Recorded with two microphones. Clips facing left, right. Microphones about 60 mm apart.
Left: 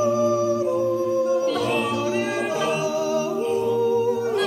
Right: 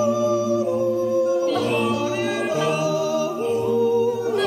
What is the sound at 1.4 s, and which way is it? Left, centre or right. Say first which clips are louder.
Music: right 1 dB; centre.